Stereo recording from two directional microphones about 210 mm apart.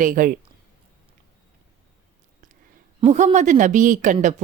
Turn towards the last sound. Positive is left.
turn(degrees=-35)  # may be behind; listen again after turning